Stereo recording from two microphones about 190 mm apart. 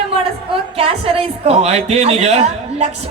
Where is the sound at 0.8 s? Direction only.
30° right (ahead or behind).